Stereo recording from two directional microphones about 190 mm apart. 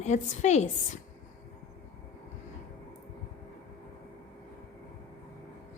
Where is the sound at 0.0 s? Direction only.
35° left (ahead or behind).